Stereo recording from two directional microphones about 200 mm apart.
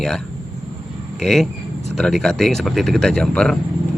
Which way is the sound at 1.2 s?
Centre (ahead or behind).